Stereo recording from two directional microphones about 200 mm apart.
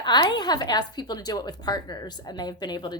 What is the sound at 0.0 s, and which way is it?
A woman's voice, 20° left (ahead or behind).